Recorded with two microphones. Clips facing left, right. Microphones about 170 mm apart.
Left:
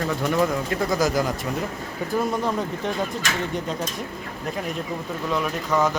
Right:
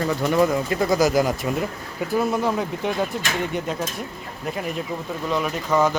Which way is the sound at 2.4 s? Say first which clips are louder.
Right 2 dB; 10° right (ahead or behind).